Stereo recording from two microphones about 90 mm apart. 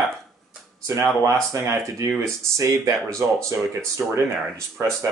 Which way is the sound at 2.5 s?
35° right (ahead or behind).